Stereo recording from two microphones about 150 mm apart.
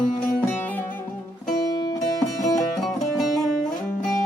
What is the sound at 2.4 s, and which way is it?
Music, centre (ahead or behind).